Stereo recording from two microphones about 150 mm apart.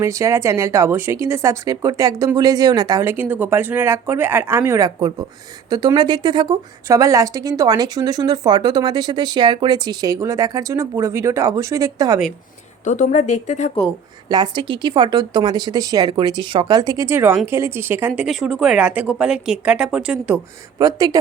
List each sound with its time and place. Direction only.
0.0 s speech: 20° right (ahead or behind)
12.8 s a woman's voice: 55° left (ahead or behind)
14.3 s speech: 30° right (ahead or behind)
18.1 s speech: centre (ahead or behind)
20.7 s speech: 25° right (ahead or behind)